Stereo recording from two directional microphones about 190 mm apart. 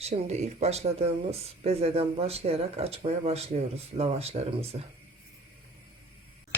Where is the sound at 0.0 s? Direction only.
35° right (ahead or behind).